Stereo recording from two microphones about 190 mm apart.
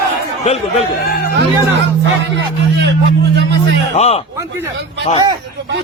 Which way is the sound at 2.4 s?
65° right (ahead or behind).